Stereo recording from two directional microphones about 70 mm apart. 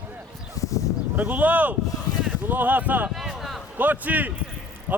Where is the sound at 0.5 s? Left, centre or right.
Left.